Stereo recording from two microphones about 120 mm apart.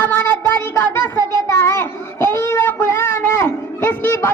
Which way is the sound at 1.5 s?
25° left (ahead or behind).